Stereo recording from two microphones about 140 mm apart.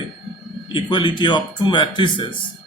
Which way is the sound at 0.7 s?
35° left (ahead or behind).